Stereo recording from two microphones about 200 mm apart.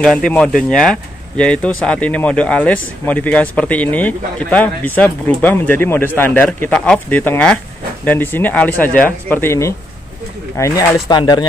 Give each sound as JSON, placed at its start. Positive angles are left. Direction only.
{"t": 0.0, "sound": "speech", "side_deg": 5}